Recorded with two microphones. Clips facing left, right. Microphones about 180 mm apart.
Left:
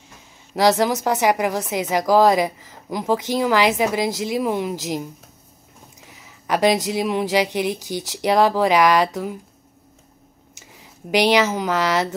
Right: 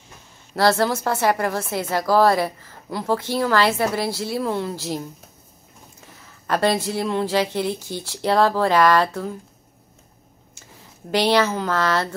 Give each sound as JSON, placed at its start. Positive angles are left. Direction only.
{"t": 0.6, "sound": "a woman's voice", "side_deg": 15}
{"t": 6.1, "sound": "a woman's voice", "side_deg": 15}
{"t": 11.1, "sound": "a woman's voice", "side_deg": 15}